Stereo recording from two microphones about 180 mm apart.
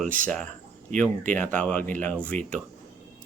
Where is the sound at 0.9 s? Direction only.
5° left (ahead or behind).